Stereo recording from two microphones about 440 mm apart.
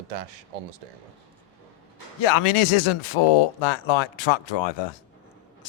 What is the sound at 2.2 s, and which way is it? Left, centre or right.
Speech, left.